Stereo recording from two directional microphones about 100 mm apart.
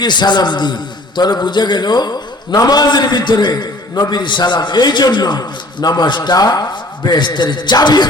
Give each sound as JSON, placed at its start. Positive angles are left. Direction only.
{"t": 0.0, "sound": "a man's voice", "side_deg": 50}